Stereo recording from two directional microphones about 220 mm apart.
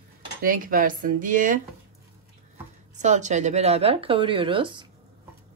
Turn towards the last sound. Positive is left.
turn(degrees=-20)  # may be behind; listen again after turning